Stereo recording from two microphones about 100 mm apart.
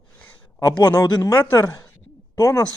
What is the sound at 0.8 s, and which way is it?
Speech, 40° left (ahead or behind).